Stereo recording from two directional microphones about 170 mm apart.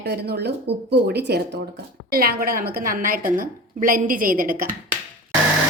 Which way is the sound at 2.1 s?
60° right (ahead or behind).